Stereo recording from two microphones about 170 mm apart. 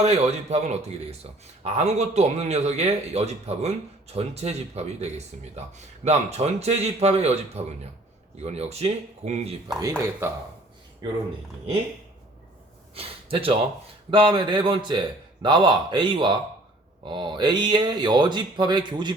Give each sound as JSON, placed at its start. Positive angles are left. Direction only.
{"t": 0.0, "sound": "a man's voice", "side_deg": -40}
{"t": 10.2, "sound": "speech", "side_deg": -15}
{"t": 12.9, "sound": "a man's voice", "side_deg": -35}